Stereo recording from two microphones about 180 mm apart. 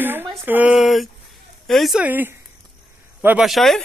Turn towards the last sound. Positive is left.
turn(degrees=0)  # may be behind; listen again after turning